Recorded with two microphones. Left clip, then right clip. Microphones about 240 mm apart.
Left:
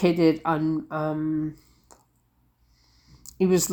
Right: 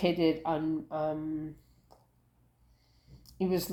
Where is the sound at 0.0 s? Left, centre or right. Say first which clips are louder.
Left 7 dB; left.